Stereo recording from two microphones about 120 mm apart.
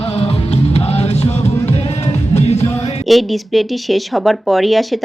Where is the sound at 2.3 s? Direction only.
60° left (ahead or behind).